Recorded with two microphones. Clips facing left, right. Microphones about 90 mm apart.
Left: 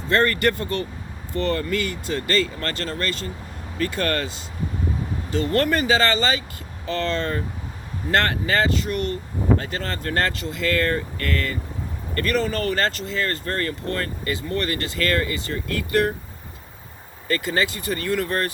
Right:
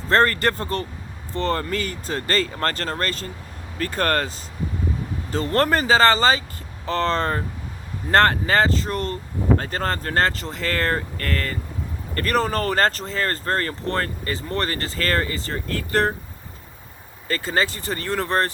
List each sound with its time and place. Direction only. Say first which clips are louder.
0.1 s speech: right 1 dB; 35° right (ahead or behind)
17.2 s speech: even; 30° right (ahead or behind)